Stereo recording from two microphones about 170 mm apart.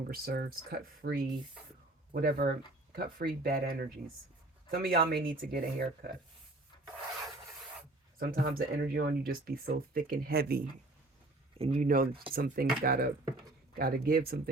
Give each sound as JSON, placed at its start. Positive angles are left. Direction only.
{"t": 0.1, "sound": "speech", "side_deg": -65}
{"t": 2.1, "sound": "speech", "side_deg": -60}
{"t": 8.2, "sound": "speech", "side_deg": -55}
{"t": 11.5, "sound": "speech", "side_deg": -35}
{"t": 11.8, "sound": "speech", "side_deg": -55}